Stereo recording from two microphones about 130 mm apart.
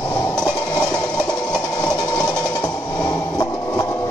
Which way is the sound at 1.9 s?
25° left (ahead or behind).